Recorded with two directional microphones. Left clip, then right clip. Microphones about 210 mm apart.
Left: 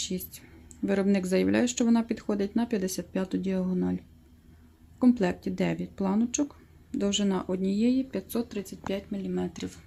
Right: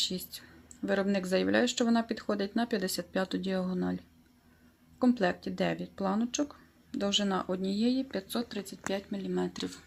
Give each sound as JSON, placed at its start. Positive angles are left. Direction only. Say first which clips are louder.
{"t": 0.9, "sound": "speech", "louder": "left 2 dB", "side_deg": 10}
{"t": 4.9, "sound": "speech", "louder": "left 3 dB", "side_deg": 10}